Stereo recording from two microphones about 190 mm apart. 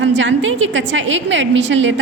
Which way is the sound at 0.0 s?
75° right (ahead or behind).